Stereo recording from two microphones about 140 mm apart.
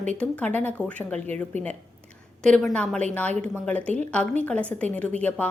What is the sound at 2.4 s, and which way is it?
Speech, 5° left (ahead or behind).